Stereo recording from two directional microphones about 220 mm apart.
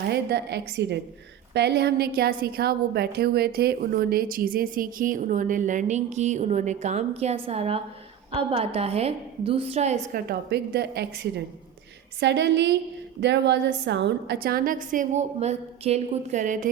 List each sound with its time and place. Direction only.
0.1 s a woman's voice: 50° right (ahead or behind)